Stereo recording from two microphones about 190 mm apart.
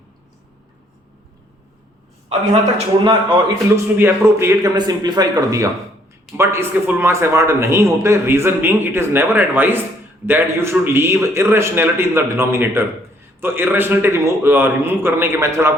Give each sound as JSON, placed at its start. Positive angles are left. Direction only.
{"t": 2.5, "sound": "a man's voice", "side_deg": -30}
{"t": 3.9, "sound": "a man's voice", "side_deg": -15}